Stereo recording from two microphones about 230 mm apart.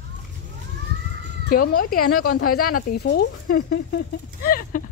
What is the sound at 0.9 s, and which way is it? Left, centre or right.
Children playing, right.